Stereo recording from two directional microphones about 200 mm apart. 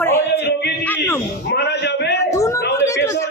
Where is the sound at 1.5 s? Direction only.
60° left (ahead or behind).